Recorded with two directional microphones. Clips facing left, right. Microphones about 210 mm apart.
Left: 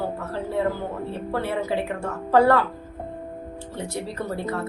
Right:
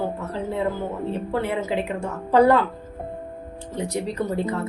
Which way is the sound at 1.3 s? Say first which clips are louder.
Even; 20° right (ahead or behind).